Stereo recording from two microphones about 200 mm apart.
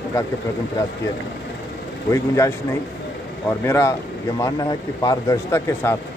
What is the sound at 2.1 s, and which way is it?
Speech, 15° left (ahead or behind).